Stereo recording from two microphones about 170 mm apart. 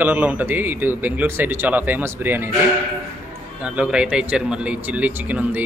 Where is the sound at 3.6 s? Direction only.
5° right (ahead or behind).